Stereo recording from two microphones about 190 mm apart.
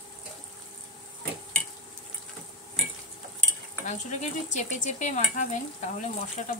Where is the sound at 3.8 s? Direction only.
40° left (ahead or behind).